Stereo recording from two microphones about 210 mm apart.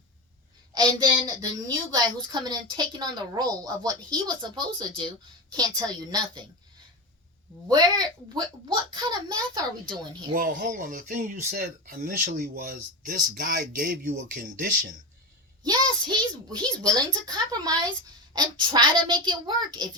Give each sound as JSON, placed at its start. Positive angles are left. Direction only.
{"t": 0.7, "sound": "a woman's voice", "side_deg": -20}
{"t": 7.7, "sound": "a woman's voice", "side_deg": -20}
{"t": 10.3, "sound": "speech", "side_deg": -45}
{"t": 15.6, "sound": "a woman's voice", "side_deg": -20}